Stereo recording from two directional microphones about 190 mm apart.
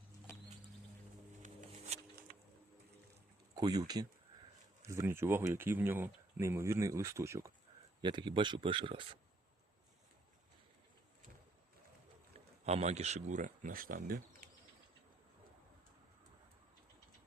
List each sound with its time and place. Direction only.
1.4 s a sound: 45° right (ahead or behind)
3.5 s speech: 20° right (ahead or behind)
12.6 s speech: 35° right (ahead or behind)